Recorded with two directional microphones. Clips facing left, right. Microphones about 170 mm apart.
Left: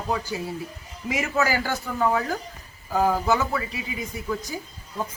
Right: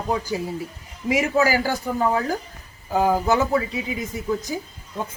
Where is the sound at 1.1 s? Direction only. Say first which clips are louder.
Right 5 dB; 10° right (ahead or behind).